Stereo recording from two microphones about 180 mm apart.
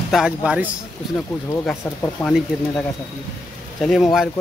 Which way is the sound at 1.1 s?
10° left (ahead or behind).